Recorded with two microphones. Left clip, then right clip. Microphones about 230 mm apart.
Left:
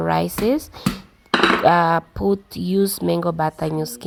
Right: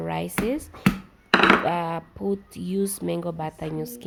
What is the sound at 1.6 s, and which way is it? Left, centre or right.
Speech, left.